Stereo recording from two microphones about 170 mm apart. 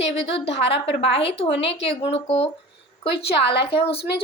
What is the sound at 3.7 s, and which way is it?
Speech, 35° left (ahead or behind).